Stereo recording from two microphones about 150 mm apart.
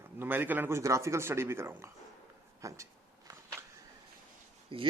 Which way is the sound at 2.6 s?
20° right (ahead or behind).